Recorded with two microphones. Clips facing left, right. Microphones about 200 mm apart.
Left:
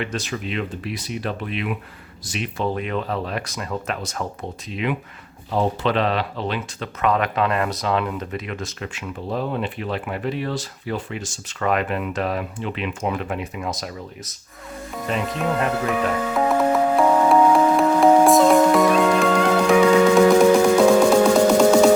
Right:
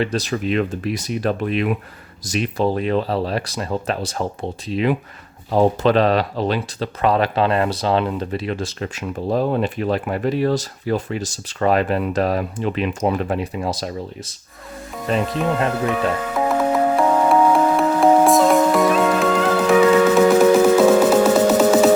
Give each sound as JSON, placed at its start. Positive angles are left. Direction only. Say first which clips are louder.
{"t": 0.0, "sound": "speech", "louder": "right 6 dB", "side_deg": -35}
{"t": 15.9, "sound": "music", "louder": "right 1 dB", "side_deg": 0}